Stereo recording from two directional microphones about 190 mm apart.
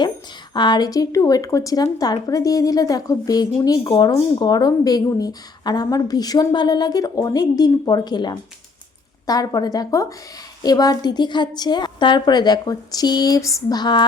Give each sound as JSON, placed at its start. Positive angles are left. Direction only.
{"t": 0.5, "sound": "speech", "side_deg": 25}